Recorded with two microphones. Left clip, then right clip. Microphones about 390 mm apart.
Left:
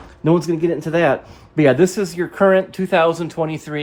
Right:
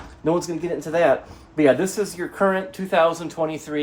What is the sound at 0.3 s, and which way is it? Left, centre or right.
Speech, centre.